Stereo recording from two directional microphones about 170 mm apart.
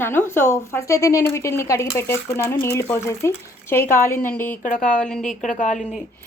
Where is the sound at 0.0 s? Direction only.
10° left (ahead or behind).